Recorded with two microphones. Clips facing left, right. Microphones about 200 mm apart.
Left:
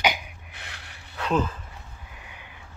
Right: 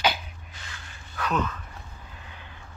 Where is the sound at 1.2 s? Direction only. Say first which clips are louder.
Left 3 dB; 30° left (ahead or behind).